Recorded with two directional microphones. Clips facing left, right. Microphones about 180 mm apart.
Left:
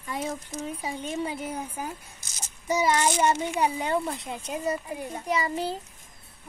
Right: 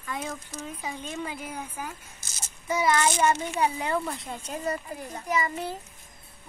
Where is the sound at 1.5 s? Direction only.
35° left (ahead or behind).